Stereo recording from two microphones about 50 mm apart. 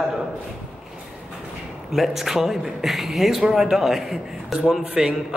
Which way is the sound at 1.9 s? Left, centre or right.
Centre.